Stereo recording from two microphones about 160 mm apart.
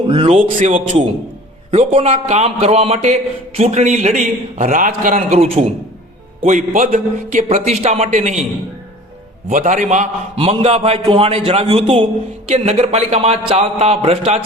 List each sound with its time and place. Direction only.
0.1 s a man's voice: 35° right (ahead or behind)
0.6 s a man's voice: 50° right (ahead or behind)
6.4 s a man's voice: 50° right (ahead or behind)
9.5 s a man's voice: 55° right (ahead or behind)
10.3 s a man's voice: 35° right (ahead or behind)